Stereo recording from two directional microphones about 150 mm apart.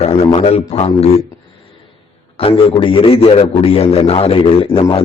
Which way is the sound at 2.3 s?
35° left (ahead or behind).